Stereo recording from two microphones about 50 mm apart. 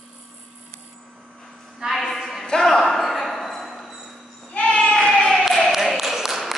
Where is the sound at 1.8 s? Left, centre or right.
Centre.